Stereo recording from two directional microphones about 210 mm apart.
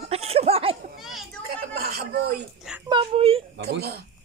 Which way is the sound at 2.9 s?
25° right (ahead or behind).